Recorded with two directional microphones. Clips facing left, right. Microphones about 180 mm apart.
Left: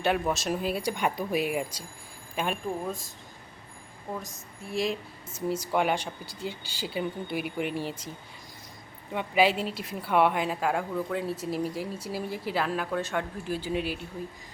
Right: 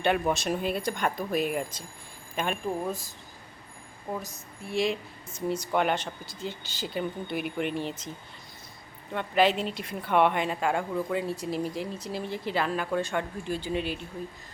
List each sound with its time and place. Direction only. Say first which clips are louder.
0.0 s speech: right 1 dB; centre (ahead or behind)
4.1 s speech: right 2 dB; centre (ahead or behind)
9.1 s speech: even; 10° left (ahead or behind)